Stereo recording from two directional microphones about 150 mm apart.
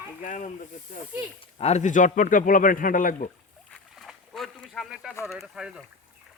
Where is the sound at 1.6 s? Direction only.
50° left (ahead or behind).